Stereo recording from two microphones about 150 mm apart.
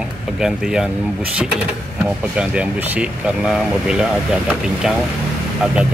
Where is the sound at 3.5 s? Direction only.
5° right (ahead or behind).